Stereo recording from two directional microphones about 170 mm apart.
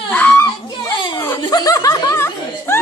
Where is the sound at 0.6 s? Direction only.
25° left (ahead or behind).